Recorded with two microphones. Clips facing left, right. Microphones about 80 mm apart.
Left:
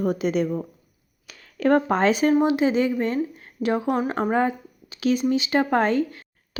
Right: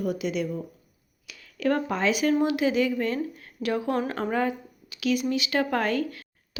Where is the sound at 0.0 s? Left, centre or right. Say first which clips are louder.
Left 5 dB; left.